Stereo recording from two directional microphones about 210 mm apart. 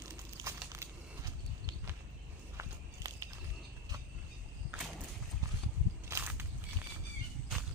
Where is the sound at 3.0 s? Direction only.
15° right (ahead or behind).